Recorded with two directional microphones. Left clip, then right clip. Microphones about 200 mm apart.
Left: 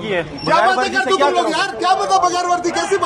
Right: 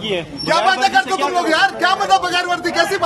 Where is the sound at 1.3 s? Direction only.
40° right (ahead or behind).